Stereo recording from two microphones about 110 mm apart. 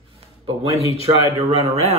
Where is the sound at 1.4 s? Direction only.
70° right (ahead or behind).